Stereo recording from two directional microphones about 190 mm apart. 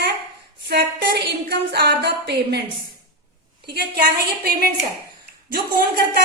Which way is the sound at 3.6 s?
60° right (ahead or behind).